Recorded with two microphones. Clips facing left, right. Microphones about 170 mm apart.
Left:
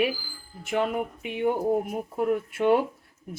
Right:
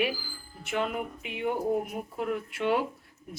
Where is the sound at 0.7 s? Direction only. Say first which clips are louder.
Left 4 dB; 40° left (ahead or behind).